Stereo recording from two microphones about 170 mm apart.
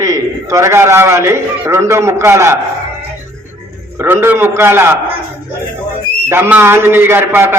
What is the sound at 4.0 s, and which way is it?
Speech, 15° right (ahead or behind).